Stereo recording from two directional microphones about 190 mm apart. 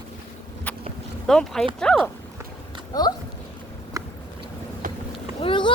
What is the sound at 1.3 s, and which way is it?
Speech, 5° left (ahead or behind).